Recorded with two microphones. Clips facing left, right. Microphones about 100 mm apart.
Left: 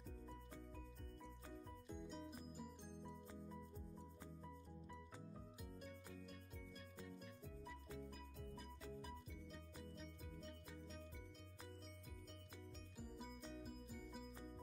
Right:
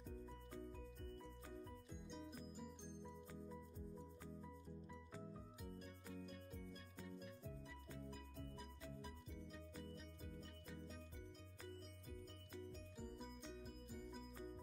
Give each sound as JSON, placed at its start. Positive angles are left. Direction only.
{"t": 1.9, "sound": "music", "side_deg": 0}
{"t": 9.9, "sound": "music", "side_deg": 0}
{"t": 13.0, "sound": "music", "side_deg": 5}